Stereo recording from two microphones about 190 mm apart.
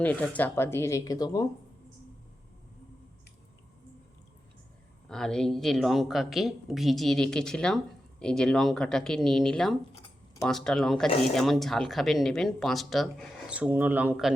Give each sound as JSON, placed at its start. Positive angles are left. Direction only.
{"t": 0.0, "sound": "speech", "side_deg": 10}
{"t": 5.0, "sound": "speech", "side_deg": 5}